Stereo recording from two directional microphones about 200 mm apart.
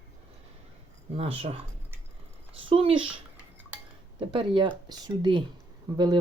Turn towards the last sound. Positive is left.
turn(degrees=-20)  # may be behind; listen again after turning